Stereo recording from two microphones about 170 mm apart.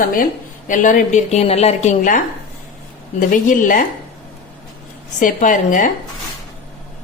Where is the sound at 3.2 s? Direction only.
50° left (ahead or behind).